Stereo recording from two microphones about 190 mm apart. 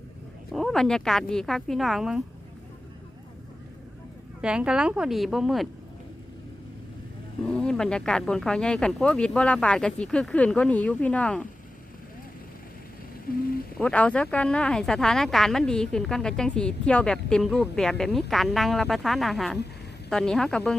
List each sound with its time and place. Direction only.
0.5 s speech: centre (ahead or behind)
4.4 s speech: 5° right (ahead or behind)
7.5 s speech: 5° left (ahead or behind)
13.3 s speech: 50° left (ahead or behind)
13.7 s speech: 5° left (ahead or behind)